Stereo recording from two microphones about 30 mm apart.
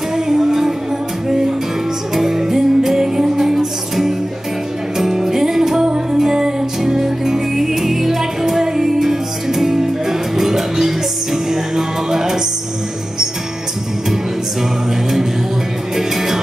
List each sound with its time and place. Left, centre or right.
0.1 s music: centre
2.1 s music: centre